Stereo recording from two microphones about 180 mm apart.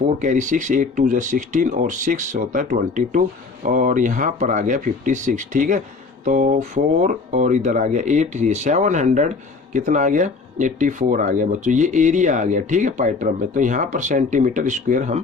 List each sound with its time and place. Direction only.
0.2 s speech: 45° right (ahead or behind)